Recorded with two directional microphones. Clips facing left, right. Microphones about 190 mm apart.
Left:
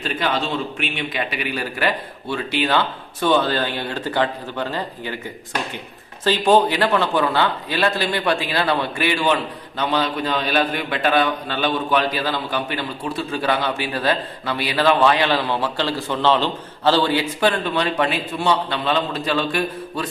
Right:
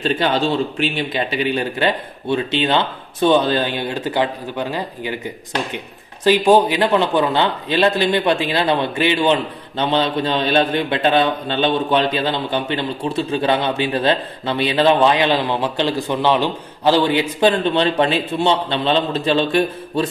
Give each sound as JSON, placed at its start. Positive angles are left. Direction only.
{"t": 0.0, "sound": "speech", "side_deg": -30}